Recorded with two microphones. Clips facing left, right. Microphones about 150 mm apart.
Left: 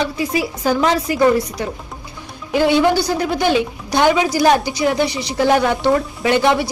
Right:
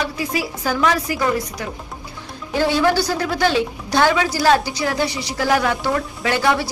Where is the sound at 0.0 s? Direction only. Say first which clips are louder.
Left 4 dB; 25° left (ahead or behind).